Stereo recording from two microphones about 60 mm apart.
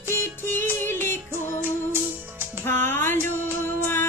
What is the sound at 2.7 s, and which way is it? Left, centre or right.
Music, left.